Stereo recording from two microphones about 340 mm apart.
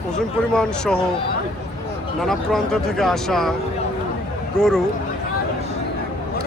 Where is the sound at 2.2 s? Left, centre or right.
Centre.